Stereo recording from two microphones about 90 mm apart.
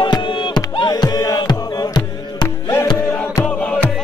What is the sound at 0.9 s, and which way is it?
Music, 45° left (ahead or behind).